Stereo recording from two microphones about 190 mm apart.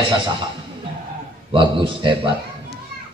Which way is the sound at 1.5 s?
25° right (ahead or behind).